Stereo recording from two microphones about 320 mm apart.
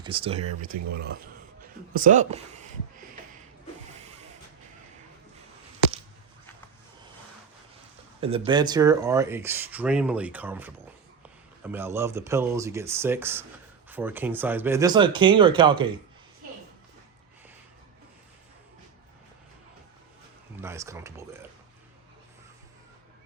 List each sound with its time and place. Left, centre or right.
0.0 s speech: centre
1.9 s speech: right
8.2 s speech: centre
20.6 s speech: centre